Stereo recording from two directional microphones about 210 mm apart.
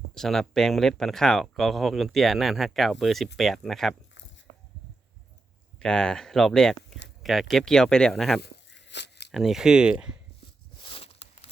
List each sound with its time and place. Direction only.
0.1 s speech: centre (ahead or behind)
5.8 s speech: 5° left (ahead or behind)
8.4 s tearing: 55° left (ahead or behind)
9.3 s speech: centre (ahead or behind)
10.8 s a sound: 25° left (ahead or behind)